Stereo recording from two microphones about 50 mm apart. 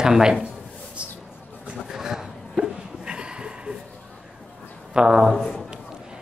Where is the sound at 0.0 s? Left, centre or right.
Centre.